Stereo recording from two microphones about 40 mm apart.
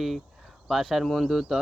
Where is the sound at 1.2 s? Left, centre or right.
Centre.